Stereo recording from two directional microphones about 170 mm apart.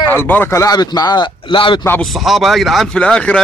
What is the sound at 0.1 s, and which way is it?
A man's voice, 10° left (ahead or behind).